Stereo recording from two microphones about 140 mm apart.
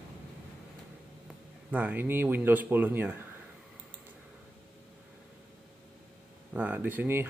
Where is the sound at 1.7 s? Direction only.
10° right (ahead or behind).